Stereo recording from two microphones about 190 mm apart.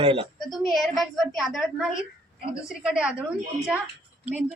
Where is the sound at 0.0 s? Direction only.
30° right (ahead or behind).